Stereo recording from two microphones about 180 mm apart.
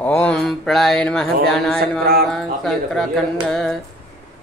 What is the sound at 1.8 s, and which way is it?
Mantra, 60° right (ahead or behind).